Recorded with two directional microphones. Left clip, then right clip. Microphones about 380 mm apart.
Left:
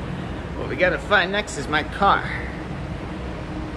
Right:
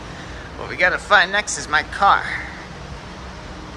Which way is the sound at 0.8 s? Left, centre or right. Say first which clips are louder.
Right 4 dB; centre.